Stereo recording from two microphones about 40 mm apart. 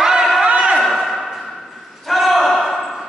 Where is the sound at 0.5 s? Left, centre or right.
Right.